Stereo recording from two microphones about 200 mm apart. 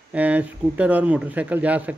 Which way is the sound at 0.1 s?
5° right (ahead or behind).